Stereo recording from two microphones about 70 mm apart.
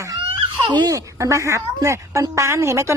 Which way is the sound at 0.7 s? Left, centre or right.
Right.